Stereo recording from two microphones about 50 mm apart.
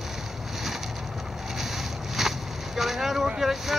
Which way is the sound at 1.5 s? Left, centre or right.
Centre.